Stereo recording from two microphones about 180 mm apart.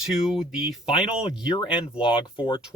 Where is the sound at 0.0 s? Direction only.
Centre (ahead or behind).